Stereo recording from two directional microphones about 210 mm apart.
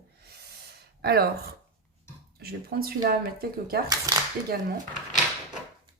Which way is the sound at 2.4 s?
45° right (ahead or behind).